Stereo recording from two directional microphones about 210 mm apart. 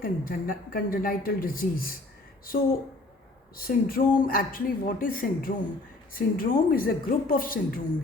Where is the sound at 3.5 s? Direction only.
45° left (ahead or behind).